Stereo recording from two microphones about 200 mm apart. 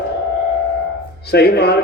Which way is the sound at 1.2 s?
55° left (ahead or behind).